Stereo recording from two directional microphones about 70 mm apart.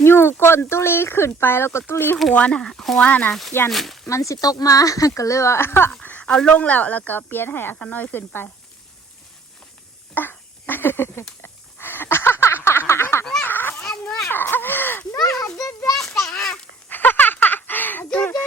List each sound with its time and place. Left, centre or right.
0.0 s speech: left
2.3 s speech: centre
3.1 s speech: left
3.7 s speech: centre
4.1 s speech: left
6.0 s speech: left
10.2 s a sound: left
13.4 s a sound: left
13.7 s cat: centre
14.3 s speech: left
15.5 s speech: left
16.0 s a sound: centre
16.3 s speech: centre
16.9 s a sound: left